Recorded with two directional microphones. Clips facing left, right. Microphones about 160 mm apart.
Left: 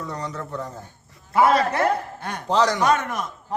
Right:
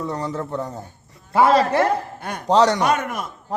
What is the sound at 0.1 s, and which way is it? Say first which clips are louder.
A man's voice: right 5 dB; 30° right (ahead or behind).